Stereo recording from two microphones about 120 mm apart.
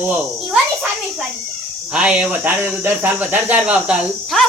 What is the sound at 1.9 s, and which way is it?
Speech, 10° right (ahead or behind).